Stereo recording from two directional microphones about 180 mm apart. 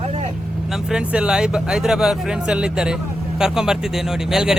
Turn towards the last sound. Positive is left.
turn(degrees=-5)  # may be behind; listen again after turning